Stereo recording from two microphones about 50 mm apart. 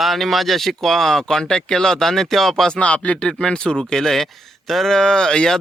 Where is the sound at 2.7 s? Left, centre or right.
Left.